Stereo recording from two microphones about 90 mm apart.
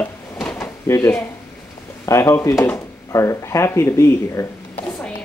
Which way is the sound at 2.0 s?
30° left (ahead or behind).